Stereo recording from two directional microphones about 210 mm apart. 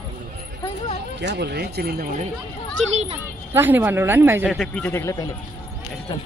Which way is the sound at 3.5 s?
10° right (ahead or behind).